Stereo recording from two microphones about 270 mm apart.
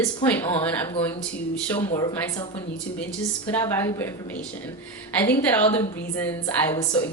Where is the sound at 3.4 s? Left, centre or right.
Centre.